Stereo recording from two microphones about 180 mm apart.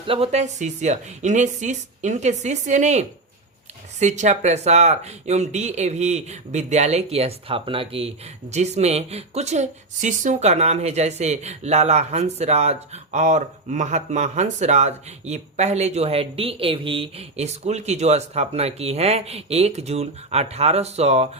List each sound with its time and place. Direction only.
0.1 s speech: 35° right (ahead or behind)